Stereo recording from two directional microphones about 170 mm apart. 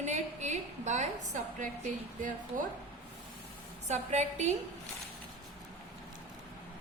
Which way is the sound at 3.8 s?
45° right (ahead or behind).